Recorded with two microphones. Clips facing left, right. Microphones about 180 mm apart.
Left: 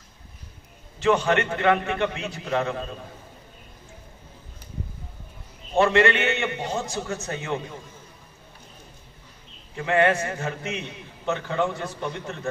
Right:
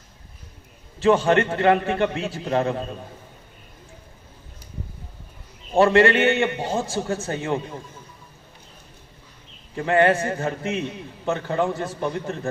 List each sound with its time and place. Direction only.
1.0 s a man's voice: 35° right (ahead or behind)
5.8 s a man's voice: 35° right (ahead or behind)
9.8 s a man's voice: 35° right (ahead or behind)